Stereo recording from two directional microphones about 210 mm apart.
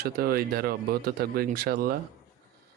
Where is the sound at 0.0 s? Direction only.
45° right (ahead or behind).